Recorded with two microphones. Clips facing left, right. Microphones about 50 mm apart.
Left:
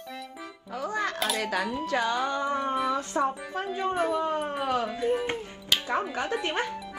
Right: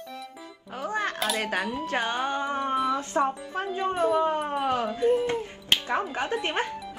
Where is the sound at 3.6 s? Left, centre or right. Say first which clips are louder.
Right 3 dB; right.